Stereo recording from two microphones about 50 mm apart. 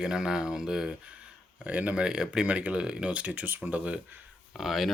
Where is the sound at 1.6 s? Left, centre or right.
Right.